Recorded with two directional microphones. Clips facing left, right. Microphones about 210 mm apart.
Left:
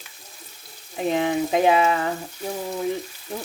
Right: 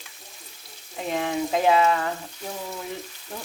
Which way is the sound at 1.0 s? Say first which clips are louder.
Left 4 dB; 20° left (ahead or behind).